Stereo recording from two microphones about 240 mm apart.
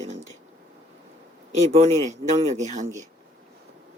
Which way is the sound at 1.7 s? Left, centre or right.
Right.